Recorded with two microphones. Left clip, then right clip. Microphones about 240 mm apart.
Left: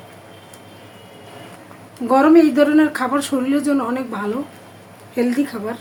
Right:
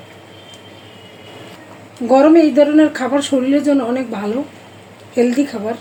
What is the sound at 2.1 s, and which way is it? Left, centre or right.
Speech, centre.